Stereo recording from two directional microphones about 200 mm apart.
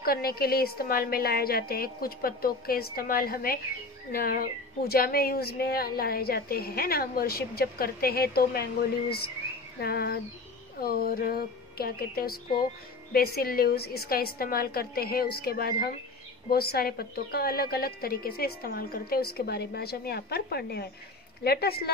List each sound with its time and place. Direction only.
0.0 s a woman's voice: 50° left (ahead or behind)
9.8 s a woman's voice: 50° left (ahead or behind)